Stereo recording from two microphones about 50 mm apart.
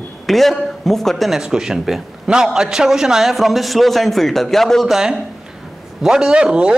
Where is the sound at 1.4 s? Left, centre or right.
Centre.